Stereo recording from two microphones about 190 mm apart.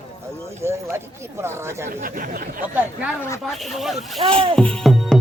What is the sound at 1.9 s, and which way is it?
Speech, 45° right (ahead or behind).